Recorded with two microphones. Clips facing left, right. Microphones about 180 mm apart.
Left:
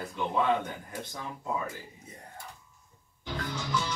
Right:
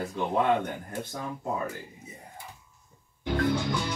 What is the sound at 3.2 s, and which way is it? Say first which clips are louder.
Music: right 9 dB; 55° right (ahead or behind).